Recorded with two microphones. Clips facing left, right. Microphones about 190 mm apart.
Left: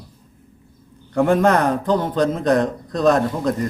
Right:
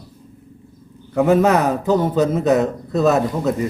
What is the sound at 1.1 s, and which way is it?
A man's voice, 5° right (ahead or behind).